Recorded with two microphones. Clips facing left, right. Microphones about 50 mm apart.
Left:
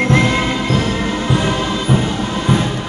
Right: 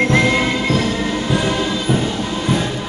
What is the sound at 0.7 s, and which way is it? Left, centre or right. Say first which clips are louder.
Music: left 1 dB; centre.